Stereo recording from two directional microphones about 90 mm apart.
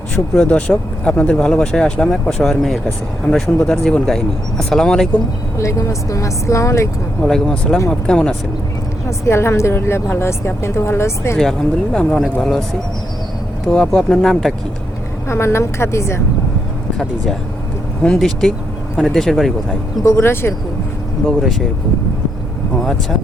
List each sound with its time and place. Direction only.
0.3 s speech: 10° left (ahead or behind)
5.5 s speech: 35° left (ahead or behind)
7.2 s speech: 5° left (ahead or behind)
9.0 s a woman's voice: 30° left (ahead or behind)
11.9 s speech: 10° left (ahead or behind)
13.7 s speech: 10° left (ahead or behind)
15.3 s a woman's voice: 30° left (ahead or behind)
18.0 s speech: 5° left (ahead or behind)
20.1 s a woman's voice: 30° left (ahead or behind)
21.2 s speech: centre (ahead or behind)
22.8 s speech: centre (ahead or behind)